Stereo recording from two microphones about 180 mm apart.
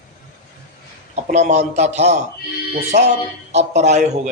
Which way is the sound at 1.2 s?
40° right (ahead or behind).